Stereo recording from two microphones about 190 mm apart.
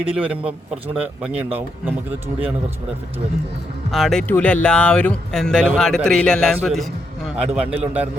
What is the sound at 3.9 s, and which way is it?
A man's voice, centre (ahead or behind).